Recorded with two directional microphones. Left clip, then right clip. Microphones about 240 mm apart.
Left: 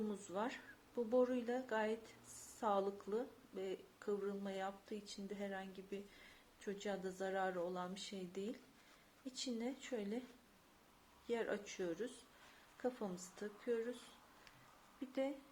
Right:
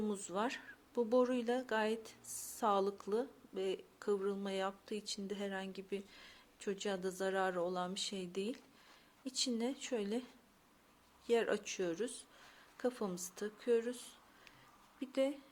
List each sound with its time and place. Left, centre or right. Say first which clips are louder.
0.1 s a woman's voice: right 5 dB; right
11.3 s a woman's voice: right 8 dB; right